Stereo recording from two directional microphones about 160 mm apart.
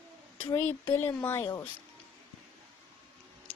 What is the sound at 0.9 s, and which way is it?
Speech, 15° left (ahead or behind).